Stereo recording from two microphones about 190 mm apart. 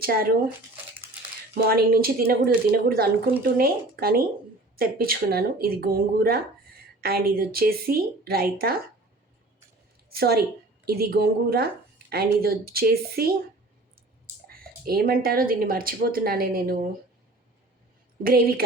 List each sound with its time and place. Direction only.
0.0 s speech: 50° right (ahead or behind)
1.6 s speech: 55° right (ahead or behind)
10.1 s a woman's voice: 55° right (ahead or behind)
14.4 s speech: 50° right (ahead or behind)
18.2 s speech: 50° right (ahead or behind)